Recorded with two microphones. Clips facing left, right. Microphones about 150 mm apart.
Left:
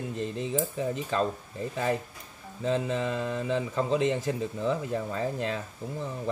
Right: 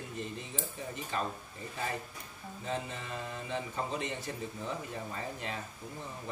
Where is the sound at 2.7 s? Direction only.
90° left.